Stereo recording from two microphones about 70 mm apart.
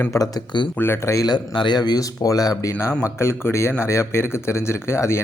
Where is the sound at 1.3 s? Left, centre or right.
Left.